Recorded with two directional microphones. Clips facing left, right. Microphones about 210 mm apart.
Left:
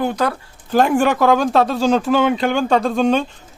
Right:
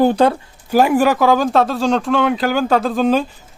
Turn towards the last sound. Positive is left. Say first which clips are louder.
# right 1 dB
turn(degrees=-5)  # may be behind; listen again after turning